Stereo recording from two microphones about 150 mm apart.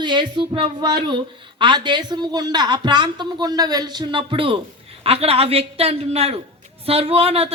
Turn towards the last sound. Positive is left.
turn(degrees=-40)  # may be behind; listen again after turning